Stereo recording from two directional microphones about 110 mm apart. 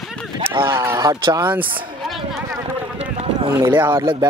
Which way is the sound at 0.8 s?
30° right (ahead or behind).